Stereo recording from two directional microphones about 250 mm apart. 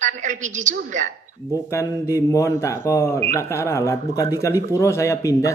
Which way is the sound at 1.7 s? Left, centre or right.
Centre.